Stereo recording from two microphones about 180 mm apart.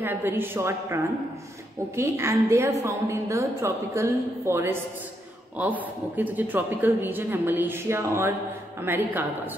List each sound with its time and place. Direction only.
0.0 s speech: 10° right (ahead or behind)